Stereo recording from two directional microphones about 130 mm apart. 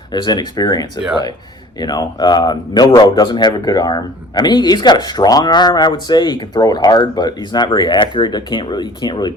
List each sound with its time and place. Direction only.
0.1 s a man's voice: 35° left (ahead or behind)